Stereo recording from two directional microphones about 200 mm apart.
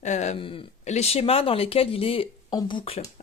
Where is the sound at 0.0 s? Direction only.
35° left (ahead or behind).